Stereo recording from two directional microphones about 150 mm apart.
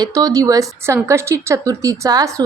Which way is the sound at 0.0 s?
25° right (ahead or behind).